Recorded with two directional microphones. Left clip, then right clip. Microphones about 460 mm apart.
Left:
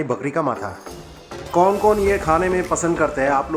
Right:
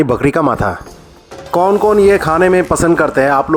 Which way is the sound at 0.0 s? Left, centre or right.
Centre.